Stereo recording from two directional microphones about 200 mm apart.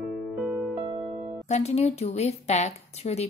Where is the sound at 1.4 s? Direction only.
35° left (ahead or behind).